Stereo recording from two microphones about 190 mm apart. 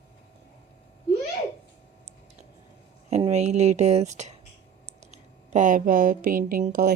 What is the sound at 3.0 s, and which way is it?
Speech, 35° right (ahead or behind).